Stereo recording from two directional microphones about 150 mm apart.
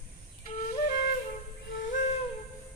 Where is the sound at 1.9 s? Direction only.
55° left (ahead or behind).